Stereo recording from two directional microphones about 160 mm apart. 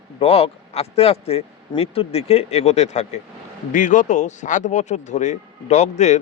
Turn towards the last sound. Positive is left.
turn(degrees=45)  # may be behind; listen again after turning